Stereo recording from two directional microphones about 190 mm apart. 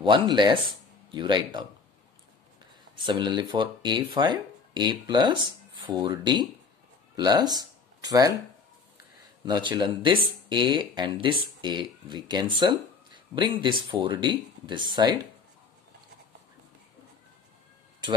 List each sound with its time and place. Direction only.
0.0 s speech: 25° right (ahead or behind)
3.1 s speech: 25° right (ahead or behind)
9.4 s speech: 25° right (ahead or behind)